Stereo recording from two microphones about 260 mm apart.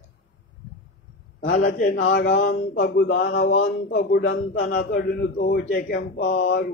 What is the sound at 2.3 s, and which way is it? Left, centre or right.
A man's voice, left.